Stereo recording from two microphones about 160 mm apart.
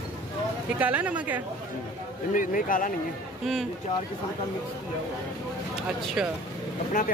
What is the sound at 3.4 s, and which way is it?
Speech, centre (ahead or behind).